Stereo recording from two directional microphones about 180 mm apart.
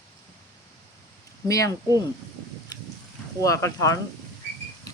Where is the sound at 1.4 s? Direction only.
20° left (ahead or behind).